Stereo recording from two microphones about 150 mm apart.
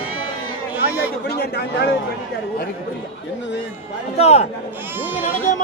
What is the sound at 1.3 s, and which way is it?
Speech, 90° left.